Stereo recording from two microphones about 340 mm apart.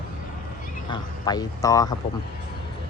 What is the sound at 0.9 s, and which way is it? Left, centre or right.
Speech, centre.